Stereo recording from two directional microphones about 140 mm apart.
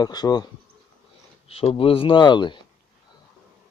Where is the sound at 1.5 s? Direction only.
45° left (ahead or behind).